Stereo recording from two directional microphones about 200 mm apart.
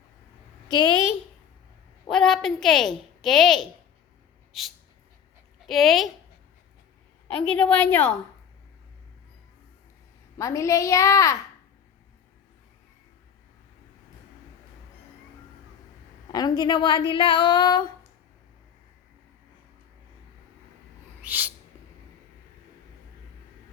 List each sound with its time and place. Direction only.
0.8 s a woman's voice: 15° left (ahead or behind)
2.0 s a child's voice: centre (ahead or behind)
5.5 s speech: centre (ahead or behind)
7.5 s a woman's voice: 5° left (ahead or behind)
10.3 s a woman's voice: 15° left (ahead or behind)
16.3 s speech: 20° left (ahead or behind)
21.2 s owl: 10° right (ahead or behind)